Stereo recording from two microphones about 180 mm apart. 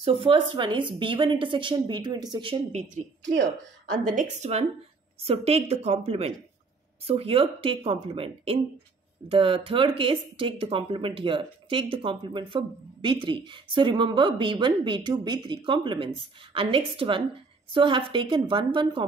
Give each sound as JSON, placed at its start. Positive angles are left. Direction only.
{"t": 0.0, "sound": "speech", "side_deg": -30}
{"t": 2.7, "sound": "a woman's voice", "side_deg": -45}